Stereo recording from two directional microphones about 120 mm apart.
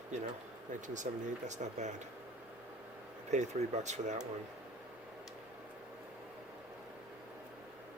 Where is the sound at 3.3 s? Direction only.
75° right (ahead or behind).